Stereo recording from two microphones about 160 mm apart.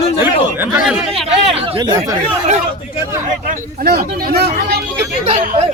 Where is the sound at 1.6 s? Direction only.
25° right (ahead or behind).